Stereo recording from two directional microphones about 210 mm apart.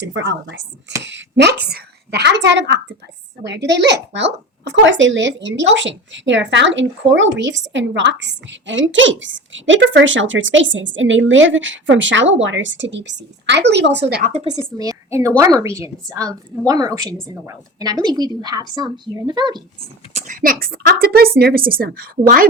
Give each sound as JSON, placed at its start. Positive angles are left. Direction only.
{"t": 0.0, "sound": "a woman's voice", "side_deg": -55}
{"t": 14.1, "sound": "a woman's voice", "side_deg": -40}
{"t": 14.5, "sound": "a woman's voice", "side_deg": -20}
{"t": 20.1, "sound": "a woman's voice", "side_deg": -35}